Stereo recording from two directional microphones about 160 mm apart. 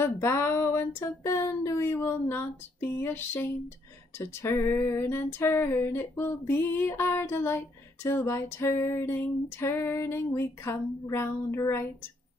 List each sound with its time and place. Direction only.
0.0 s female singing: 15° left (ahead or behind)